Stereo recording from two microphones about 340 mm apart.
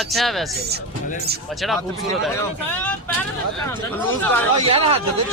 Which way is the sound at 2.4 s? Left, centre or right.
Centre.